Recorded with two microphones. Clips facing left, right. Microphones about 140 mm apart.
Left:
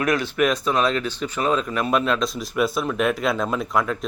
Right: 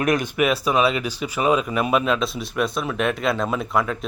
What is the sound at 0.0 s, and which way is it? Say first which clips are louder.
Speech: right 1 dB; 20° right (ahead or behind).